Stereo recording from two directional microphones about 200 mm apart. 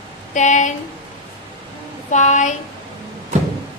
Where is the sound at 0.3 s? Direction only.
40° left (ahead or behind).